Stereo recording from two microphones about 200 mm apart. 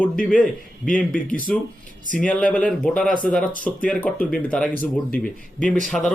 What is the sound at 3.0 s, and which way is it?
Speech, 45° left (ahead or behind).